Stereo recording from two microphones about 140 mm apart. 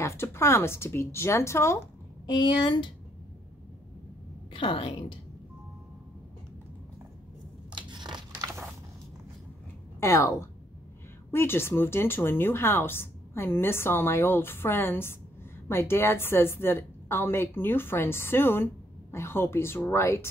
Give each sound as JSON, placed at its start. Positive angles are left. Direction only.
{"t": 0.0, "sound": "speech", "side_deg": 20}
{"t": 2.2, "sound": "a woman's voice", "side_deg": 30}
{"t": 4.5, "sound": "a woman's voice", "side_deg": 40}
{"t": 7.7, "sound": "biting", "side_deg": -30}
{"t": 8.4, "sound": "a sound", "side_deg": -20}
{"t": 9.9, "sound": "speech", "side_deg": 20}